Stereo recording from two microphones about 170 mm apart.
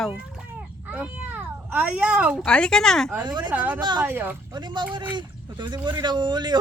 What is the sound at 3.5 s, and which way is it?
Speech, 10° right (ahead or behind).